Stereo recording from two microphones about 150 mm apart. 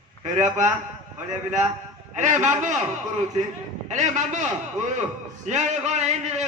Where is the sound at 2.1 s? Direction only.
55° right (ahead or behind).